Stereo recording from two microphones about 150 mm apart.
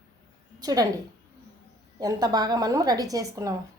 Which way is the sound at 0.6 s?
25° right (ahead or behind).